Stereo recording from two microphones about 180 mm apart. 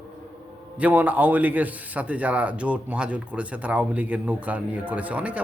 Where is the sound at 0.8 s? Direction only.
10° right (ahead or behind).